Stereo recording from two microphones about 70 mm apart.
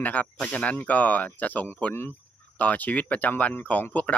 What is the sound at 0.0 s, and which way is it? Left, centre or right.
Speech, left.